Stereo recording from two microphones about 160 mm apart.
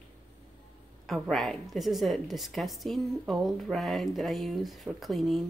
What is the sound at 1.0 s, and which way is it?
A woman's voice, centre (ahead or behind).